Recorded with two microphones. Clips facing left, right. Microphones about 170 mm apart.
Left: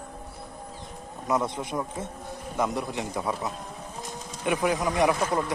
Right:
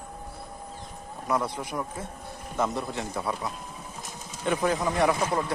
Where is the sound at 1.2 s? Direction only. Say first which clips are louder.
Left 1 dB; 20° left (ahead or behind).